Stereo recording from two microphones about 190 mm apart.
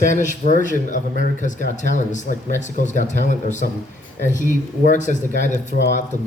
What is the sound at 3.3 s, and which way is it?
Speech, 40° left (ahead or behind).